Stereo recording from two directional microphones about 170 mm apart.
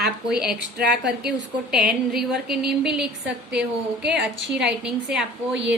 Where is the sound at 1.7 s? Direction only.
5° right (ahead or behind).